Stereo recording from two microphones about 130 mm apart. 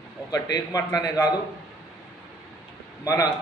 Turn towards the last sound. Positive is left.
turn(degrees=25)  # may be behind; listen again after turning